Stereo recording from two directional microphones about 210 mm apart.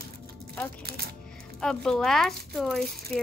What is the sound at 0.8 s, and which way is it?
Speech, 50° right (ahead or behind).